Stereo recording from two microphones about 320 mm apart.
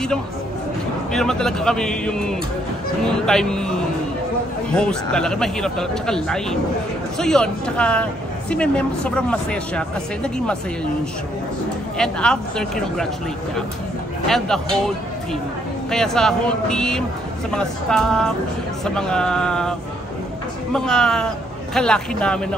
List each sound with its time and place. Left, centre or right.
1.1 s a woman's voice: centre
4.7 s a woman's voice: centre
12.0 s a woman's voice: centre
14.2 s a woman's voice: centre
15.9 s a woman's voice: centre
20.7 s a woman's voice: centre